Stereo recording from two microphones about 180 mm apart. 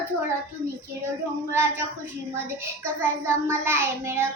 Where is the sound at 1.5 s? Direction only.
15° right (ahead or behind).